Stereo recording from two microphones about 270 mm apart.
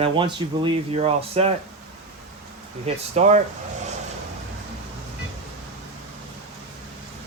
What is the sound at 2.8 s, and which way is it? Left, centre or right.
Speech, right.